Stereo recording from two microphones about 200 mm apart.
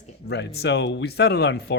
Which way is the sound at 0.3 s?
55° left (ahead or behind).